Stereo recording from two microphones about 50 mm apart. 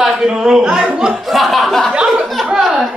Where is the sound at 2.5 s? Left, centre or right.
Centre.